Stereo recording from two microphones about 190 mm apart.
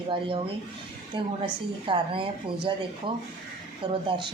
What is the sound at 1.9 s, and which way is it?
A woman's voice, 25° right (ahead or behind).